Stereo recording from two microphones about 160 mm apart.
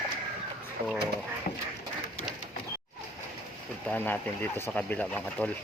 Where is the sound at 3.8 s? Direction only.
10° left (ahead or behind).